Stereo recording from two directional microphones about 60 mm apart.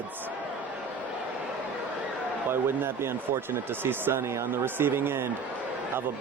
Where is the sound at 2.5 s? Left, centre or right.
Right.